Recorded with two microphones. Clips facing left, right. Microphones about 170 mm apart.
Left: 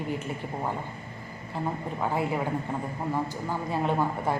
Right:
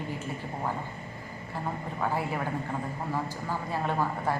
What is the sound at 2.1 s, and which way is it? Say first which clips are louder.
Speech: left 5 dB; 20° left (ahead or behind).